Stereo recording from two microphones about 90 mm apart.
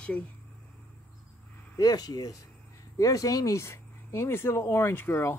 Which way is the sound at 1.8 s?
45° left (ahead or behind).